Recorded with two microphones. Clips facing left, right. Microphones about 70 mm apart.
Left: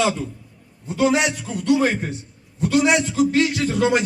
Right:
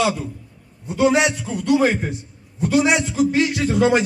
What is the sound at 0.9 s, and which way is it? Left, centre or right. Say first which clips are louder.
A man's voice: right 2 dB; centre.